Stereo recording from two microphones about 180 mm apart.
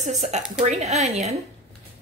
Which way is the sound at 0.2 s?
40° right (ahead or behind).